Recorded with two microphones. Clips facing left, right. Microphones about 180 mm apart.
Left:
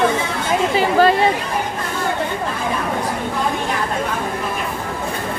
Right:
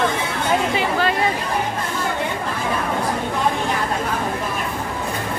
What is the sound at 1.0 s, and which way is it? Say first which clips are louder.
Chatter: left 10 dB; 30° left (ahead or behind).